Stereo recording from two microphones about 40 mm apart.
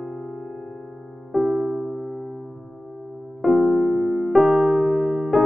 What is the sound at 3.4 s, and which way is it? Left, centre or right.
Electric piano, centre.